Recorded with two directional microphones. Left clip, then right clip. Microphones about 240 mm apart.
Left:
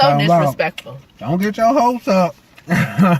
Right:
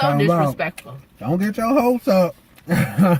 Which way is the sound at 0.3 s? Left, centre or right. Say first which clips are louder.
Left 5 dB; centre.